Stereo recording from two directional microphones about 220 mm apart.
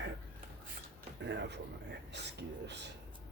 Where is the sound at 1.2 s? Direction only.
50° right (ahead or behind).